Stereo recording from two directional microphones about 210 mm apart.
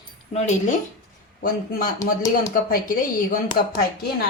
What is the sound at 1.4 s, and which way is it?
Speech, 40° left (ahead or behind).